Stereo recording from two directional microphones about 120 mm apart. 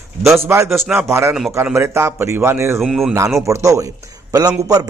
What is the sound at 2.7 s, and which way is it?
Speech, centre (ahead or behind).